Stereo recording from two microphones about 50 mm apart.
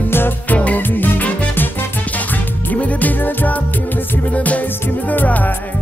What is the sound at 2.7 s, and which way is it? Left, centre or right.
Music, left.